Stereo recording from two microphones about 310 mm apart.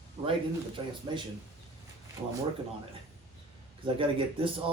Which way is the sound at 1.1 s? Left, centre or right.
Centre.